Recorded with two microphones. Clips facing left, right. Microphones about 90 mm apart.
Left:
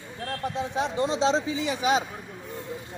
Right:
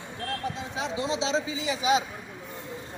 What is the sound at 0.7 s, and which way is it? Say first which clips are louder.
Speech: left 4 dB; 50° left (ahead or behind).